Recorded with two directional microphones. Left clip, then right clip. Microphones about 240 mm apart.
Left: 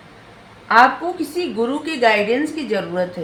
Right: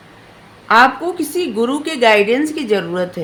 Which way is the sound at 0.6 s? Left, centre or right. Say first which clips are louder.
Right 2 dB; right.